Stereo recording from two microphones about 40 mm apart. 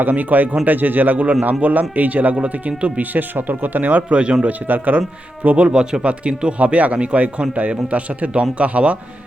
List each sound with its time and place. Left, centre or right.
0.0 s speech: right
3.0 s speech: right
4.2 s a man's voice: right
5.4 s speech: right
5.7 s a man's voice: centre
6.0 s speech: right